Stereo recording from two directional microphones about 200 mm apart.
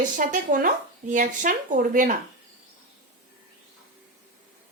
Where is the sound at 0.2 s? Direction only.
45° right (ahead or behind).